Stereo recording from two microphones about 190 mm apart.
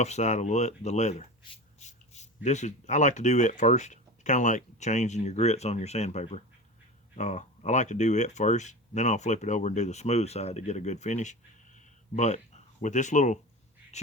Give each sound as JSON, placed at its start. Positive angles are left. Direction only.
{"t": 0.0, "sound": "speech", "side_deg": 35}